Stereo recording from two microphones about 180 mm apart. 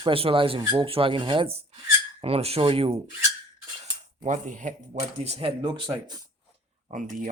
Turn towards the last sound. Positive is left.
turn(degrees=-45)  # may be behind; listen again after turning